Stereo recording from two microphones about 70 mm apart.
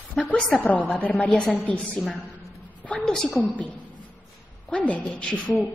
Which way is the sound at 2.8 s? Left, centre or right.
Centre.